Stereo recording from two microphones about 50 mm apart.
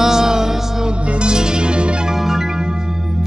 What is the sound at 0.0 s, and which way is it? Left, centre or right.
Music, centre.